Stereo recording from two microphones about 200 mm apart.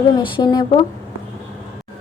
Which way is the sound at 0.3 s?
25° left (ahead or behind).